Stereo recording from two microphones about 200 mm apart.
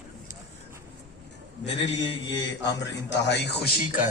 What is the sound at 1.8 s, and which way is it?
Speech, 30° left (ahead or behind).